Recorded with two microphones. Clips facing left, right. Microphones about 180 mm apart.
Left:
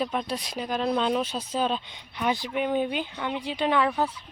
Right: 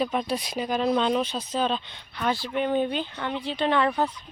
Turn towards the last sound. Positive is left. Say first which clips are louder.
# right 1 dB
turn(degrees=5)  # may be behind; listen again after turning